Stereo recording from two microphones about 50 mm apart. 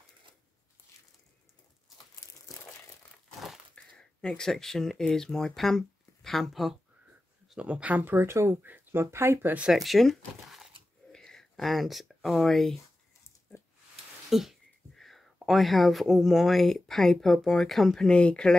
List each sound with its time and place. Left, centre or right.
3.3 s crumpling: centre
3.7 s speech: centre
7.6 s speech: right
8.0 s speech: right
8.3 s speech: right
8.6 s speech: right
9.0 s speech: right
9.7 s speech: centre
11.1 s a sound: centre
14.3 s a sound: centre
15.3 s speech: centre
18.0 s speech: left